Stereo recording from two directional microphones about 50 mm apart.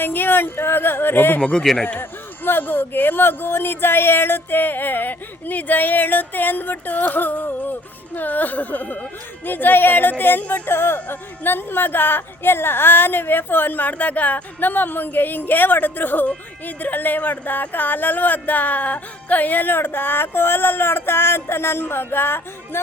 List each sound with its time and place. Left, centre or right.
0.0 s speech: left
1.7 s a man's voice: centre
2.0 s speech: left